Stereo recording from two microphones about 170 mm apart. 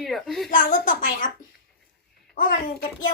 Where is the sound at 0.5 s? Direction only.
55° left (ahead or behind).